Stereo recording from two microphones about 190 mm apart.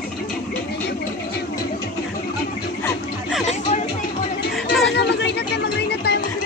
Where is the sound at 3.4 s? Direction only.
35° left (ahead or behind).